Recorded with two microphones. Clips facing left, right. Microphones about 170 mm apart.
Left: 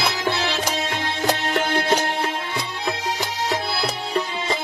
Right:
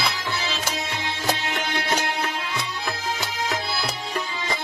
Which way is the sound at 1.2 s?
45° left (ahead or behind).